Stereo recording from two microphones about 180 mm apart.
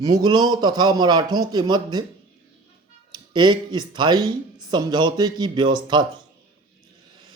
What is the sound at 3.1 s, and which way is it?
Speech, 25° right (ahead or behind).